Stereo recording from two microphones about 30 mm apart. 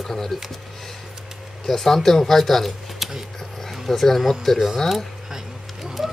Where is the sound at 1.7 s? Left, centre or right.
Centre.